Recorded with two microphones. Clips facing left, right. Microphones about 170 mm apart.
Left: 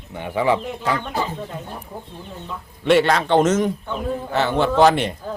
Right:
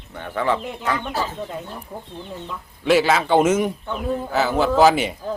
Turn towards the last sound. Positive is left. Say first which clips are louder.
# even
turn(degrees=-5)  # may be behind; listen again after turning